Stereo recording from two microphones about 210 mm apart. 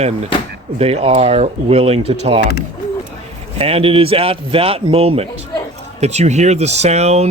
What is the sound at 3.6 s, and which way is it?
Speech, 30° right (ahead or behind).